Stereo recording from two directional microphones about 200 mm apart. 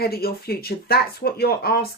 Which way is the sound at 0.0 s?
50° left (ahead or behind).